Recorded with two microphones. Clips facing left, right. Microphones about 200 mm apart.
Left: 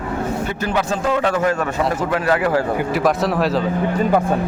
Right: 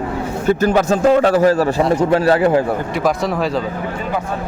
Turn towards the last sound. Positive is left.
turn(degrees=0)  # may be behind; listen again after turning